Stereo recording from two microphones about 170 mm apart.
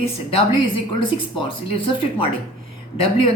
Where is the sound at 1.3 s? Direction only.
30° left (ahead or behind).